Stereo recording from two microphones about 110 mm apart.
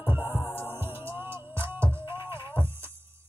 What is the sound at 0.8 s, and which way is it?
Music, 20° right (ahead or behind).